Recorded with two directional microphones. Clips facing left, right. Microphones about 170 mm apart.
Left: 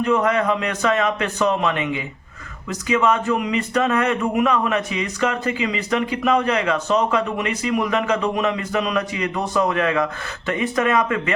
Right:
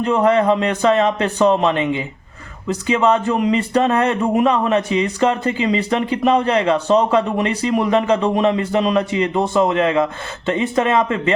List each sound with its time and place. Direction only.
0.0 s a man's voice: 30° right (ahead or behind)